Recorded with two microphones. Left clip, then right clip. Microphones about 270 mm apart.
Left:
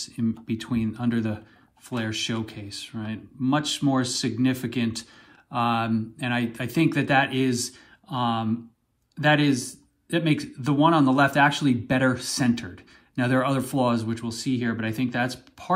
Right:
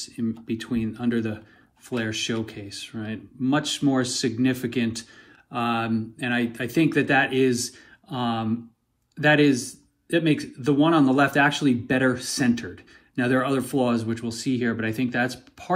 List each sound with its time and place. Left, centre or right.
0.0 s speech: left